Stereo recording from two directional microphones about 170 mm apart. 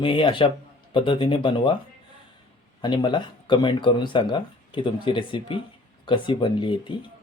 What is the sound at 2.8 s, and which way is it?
Speech, 25° left (ahead or behind).